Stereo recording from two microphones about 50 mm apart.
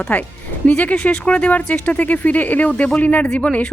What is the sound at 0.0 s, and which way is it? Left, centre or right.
Speech, left.